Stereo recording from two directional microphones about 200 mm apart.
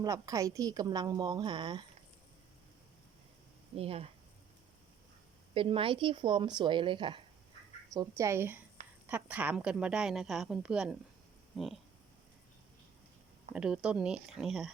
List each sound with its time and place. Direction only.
0.0 s a woman's voice: 15° right (ahead or behind)
3.8 s a woman's voice: 30° right (ahead or behind)
5.5 s a woman's voice: 25° right (ahead or behind)
7.9 s a woman's voice: 15° right (ahead or behind)
13.5 s a woman's voice: 5° right (ahead or behind)